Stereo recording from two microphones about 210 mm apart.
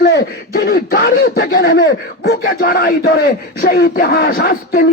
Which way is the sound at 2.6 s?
45° left (ahead or behind).